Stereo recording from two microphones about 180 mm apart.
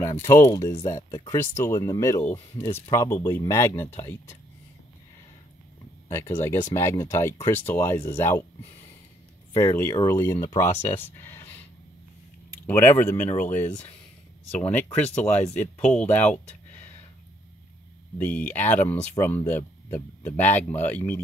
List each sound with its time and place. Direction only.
0.2 s speech: 15° left (ahead or behind)
6.0 s speech: 15° left (ahead or behind)
9.5 s speech: 20° left (ahead or behind)
11.1 s a sound: 10° left (ahead or behind)
12.6 s speech: 15° left (ahead or behind)
18.2 s speech: 10° left (ahead or behind)